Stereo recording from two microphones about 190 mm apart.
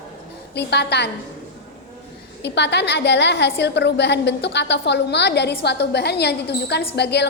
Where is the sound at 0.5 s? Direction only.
60° left (ahead or behind).